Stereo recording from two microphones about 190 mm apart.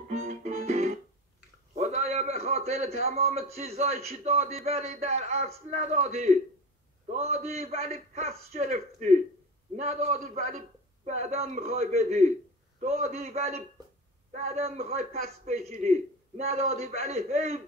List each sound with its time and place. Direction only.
0.1 s music: 40° right (ahead or behind)
1.8 s a sound: 35° right (ahead or behind)
3.3 s a man's voice: 35° right (ahead or behind)